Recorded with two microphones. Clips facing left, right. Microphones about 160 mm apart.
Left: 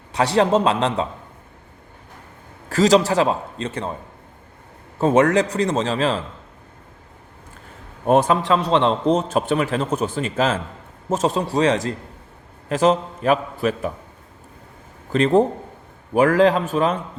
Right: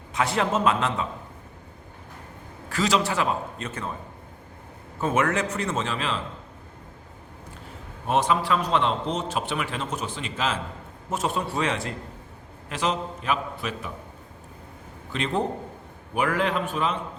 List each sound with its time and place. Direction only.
0.1 s a man's voice: 35° left (ahead or behind)
2.6 s a man's voice: 40° left (ahead or behind)
4.9 s a man's voice: 35° left (ahead or behind)
8.0 s a man's voice: 45° left (ahead or behind)
8.4 s a man's voice: 30° left (ahead or behind)
15.1 s a man's voice: 40° left (ahead or behind)